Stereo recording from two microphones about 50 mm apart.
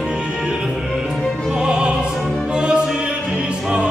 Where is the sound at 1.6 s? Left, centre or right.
Centre.